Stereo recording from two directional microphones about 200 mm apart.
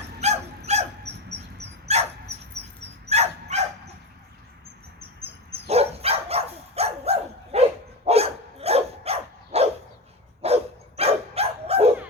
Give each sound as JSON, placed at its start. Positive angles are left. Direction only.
{"t": 0.2, "sound": "dog", "side_deg": -35}
{"t": 1.0, "sound": "dog", "side_deg": -60}
{"t": 1.9, "sound": "dog", "side_deg": -35}
{"t": 3.1, "sound": "dog", "side_deg": -35}
{"t": 4.9, "sound": "dog", "side_deg": -30}